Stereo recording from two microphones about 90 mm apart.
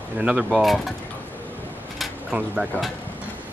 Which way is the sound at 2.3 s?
15° right (ahead or behind).